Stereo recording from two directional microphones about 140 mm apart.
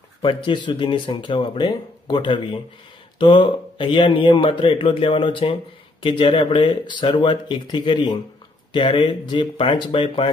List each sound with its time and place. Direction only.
0.2 s a man's voice: 35° left (ahead or behind)